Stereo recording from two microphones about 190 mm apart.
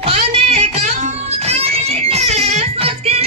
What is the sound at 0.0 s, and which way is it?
Music, 30° right (ahead or behind).